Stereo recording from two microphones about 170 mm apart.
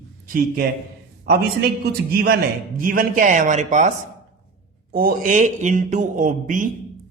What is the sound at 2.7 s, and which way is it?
Speech, 55° right (ahead or behind).